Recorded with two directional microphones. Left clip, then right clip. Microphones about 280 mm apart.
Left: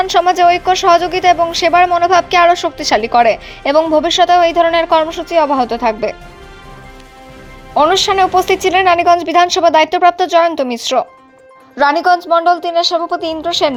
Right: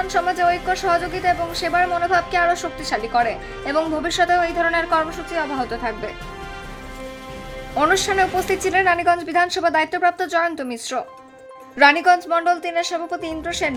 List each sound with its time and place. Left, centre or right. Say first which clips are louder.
0.1 s a woman's voice: left 9 dB; left
7.8 s a woman's voice: left 7 dB; centre